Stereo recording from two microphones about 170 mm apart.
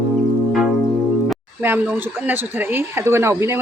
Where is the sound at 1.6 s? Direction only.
10° right (ahead or behind).